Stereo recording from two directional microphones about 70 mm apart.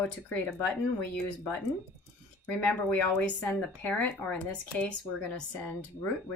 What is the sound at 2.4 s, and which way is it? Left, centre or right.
Speech, left.